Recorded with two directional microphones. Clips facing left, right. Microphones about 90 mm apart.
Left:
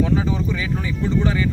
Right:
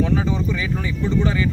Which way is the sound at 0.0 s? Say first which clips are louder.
Even; 15° left (ahead or behind).